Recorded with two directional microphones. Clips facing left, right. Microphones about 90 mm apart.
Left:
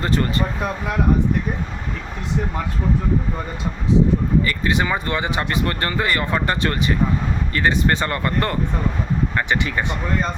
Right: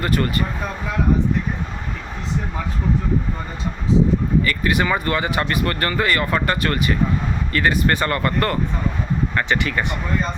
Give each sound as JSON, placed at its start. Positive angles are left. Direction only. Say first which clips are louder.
{"t": 0.0, "sound": "speech", "louder": "even", "side_deg": 25}
{"t": 4.4, "sound": "speech", "louder": "right 1 dB", "side_deg": 25}